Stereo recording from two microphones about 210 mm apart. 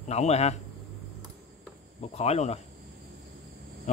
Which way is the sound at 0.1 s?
30° left (ahead or behind).